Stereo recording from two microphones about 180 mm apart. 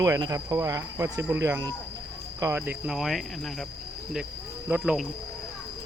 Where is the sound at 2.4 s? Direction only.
15° right (ahead or behind).